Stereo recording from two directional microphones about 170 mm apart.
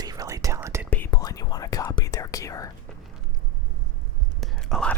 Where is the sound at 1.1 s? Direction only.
20° left (ahead or behind).